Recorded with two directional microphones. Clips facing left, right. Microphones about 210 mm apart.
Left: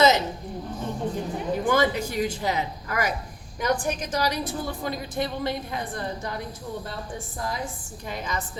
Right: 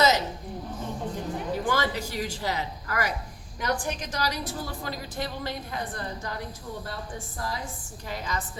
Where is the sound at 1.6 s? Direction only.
20° left (ahead or behind).